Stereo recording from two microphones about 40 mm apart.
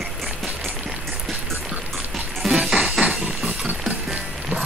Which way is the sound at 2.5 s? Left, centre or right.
Right.